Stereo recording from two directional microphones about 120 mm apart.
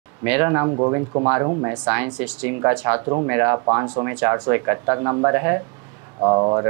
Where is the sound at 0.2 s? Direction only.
25° right (ahead or behind).